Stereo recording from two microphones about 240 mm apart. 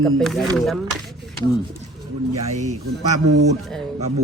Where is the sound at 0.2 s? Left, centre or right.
Centre.